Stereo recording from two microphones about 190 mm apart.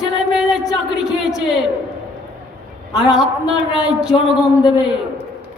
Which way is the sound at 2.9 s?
5° right (ahead or behind).